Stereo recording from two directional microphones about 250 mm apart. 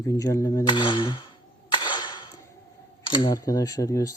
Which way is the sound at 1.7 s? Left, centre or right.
Centre.